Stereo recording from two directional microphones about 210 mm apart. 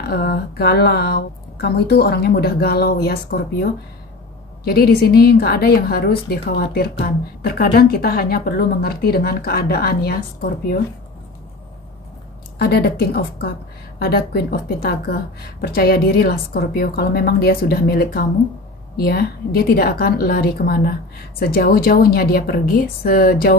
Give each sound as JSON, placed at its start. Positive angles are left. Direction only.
{"t": 0.0, "sound": "a woman's voice", "side_deg": 50}
{"t": 12.5, "sound": "a woman's voice", "side_deg": 50}